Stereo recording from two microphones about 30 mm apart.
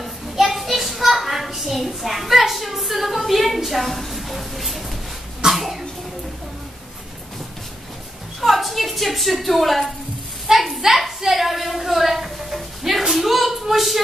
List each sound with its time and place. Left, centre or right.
0.0 s a sound: centre
5.5 s cough: centre
8.4 s a woman's voice: centre
10.5 s a woman's voice: centre
11.3 s a sound: centre
13.1 s a woman's voice: centre